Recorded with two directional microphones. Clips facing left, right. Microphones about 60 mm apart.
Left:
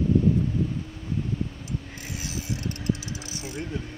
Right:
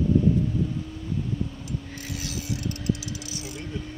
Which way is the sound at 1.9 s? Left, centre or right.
Left.